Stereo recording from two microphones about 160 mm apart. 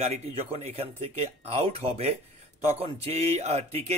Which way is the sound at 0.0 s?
40° right (ahead or behind).